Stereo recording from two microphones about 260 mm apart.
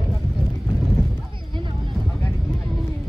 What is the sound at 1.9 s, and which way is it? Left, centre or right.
Vehicle, centre.